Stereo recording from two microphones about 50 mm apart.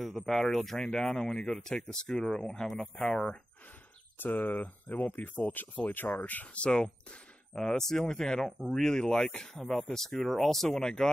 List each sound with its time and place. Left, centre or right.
0.0 s speech: centre
4.2 s speech: left; by 8.5 s centre
8.5 s speech: centre
8.7 s speech: centre